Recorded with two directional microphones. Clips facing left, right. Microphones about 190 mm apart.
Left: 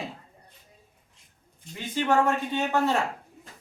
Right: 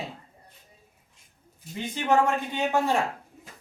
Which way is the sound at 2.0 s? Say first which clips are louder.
Even; 20° right (ahead or behind).